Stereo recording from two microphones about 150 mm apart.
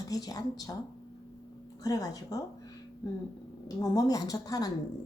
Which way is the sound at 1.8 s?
25° left (ahead or behind).